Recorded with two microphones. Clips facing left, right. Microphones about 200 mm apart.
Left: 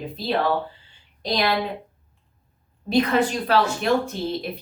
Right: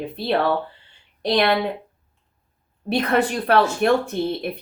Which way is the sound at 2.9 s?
60° right (ahead or behind).